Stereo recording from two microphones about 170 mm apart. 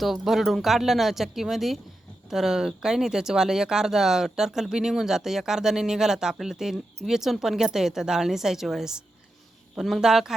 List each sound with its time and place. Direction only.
0.0 s speech: centre (ahead or behind)